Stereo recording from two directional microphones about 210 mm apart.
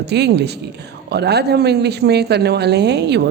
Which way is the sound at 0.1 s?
50° right (ahead or behind).